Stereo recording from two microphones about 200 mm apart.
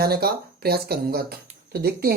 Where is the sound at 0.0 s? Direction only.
50° right (ahead or behind).